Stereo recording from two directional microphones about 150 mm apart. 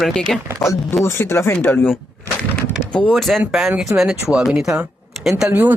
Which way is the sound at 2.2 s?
10° left (ahead or behind).